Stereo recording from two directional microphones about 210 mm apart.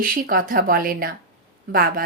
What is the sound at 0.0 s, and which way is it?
A woman's voice, 40° right (ahead or behind).